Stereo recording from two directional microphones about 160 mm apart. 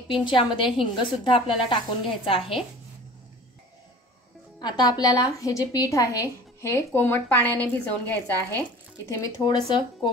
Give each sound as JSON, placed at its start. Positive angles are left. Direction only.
{"t": 0.1, "sound": "a woman's voice", "side_deg": 30}
{"t": 4.6, "sound": "a woman's voice", "side_deg": 25}
{"t": 9.1, "sound": "a woman's voice", "side_deg": 25}